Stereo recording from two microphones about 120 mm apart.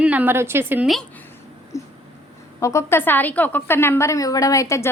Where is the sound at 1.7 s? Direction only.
25° left (ahead or behind).